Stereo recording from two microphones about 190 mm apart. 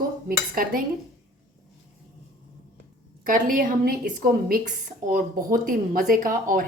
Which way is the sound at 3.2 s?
45° right (ahead or behind).